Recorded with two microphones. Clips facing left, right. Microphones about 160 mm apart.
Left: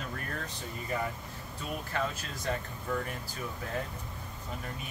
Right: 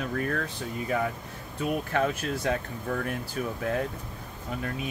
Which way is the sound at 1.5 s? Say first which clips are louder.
Right 8 dB; 65° right (ahead or behind).